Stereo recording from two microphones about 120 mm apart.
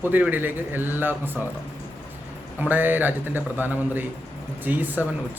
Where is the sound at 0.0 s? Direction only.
15° right (ahead or behind).